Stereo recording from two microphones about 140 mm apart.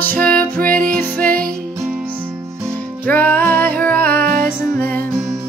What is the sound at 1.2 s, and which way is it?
Music, 90° right.